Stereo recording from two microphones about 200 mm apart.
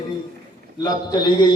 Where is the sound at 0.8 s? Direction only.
20° left (ahead or behind).